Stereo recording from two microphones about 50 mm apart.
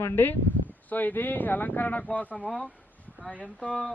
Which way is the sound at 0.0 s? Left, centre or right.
Left.